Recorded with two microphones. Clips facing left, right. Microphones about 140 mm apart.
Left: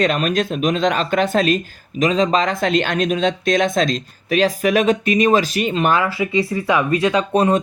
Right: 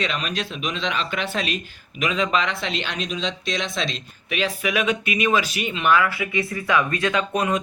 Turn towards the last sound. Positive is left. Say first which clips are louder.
# left 6 dB
turn(degrees=35)  # may be behind; listen again after turning